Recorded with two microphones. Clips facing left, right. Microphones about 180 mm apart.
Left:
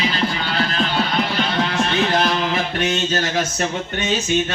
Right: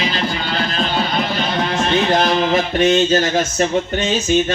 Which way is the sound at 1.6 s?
50° right (ahead or behind).